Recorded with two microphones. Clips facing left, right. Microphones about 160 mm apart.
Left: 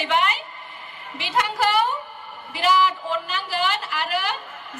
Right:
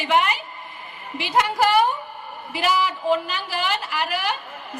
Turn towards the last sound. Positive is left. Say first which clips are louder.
# right 2 dB
turn(degrees=-15)  # may be behind; listen again after turning